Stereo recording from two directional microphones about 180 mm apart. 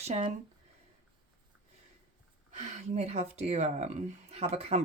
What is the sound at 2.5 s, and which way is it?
Speech, 40° right (ahead or behind).